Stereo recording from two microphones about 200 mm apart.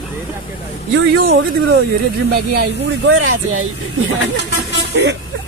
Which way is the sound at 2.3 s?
55° right (ahead or behind).